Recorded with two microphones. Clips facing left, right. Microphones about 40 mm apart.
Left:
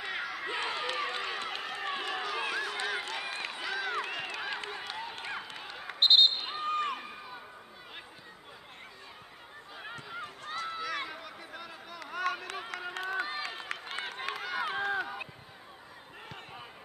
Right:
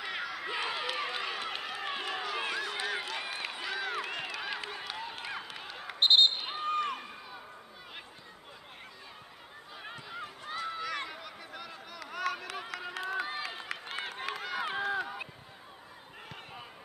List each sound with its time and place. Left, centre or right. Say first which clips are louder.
0.0 s run: left 1 dB; centre
10.4 s run: even; centre
10.7 s a sound: left 1 dB; centre